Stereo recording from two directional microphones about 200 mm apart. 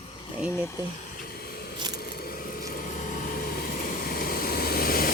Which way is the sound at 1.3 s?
50° left (ahead or behind).